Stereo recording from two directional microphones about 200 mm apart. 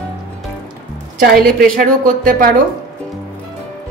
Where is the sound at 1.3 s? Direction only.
45° right (ahead or behind).